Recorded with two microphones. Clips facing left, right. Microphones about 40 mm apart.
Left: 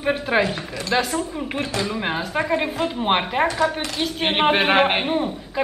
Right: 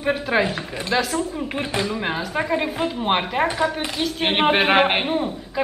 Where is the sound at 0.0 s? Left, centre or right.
Centre.